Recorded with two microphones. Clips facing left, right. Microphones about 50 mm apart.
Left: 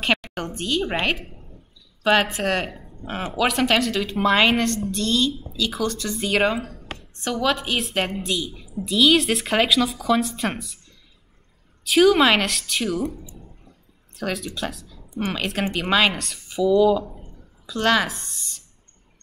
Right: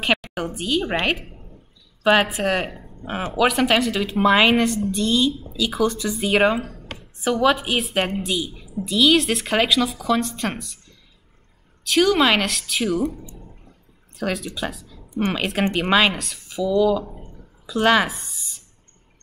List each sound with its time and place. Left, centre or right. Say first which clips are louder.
0.0 s a woman's voice: right 1 dB; centre
11.8 s speech: left 2 dB; centre
17.6 s a woman's voice: right 3 dB; centre